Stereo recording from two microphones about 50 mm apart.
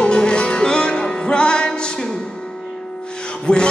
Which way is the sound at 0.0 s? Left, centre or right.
Centre.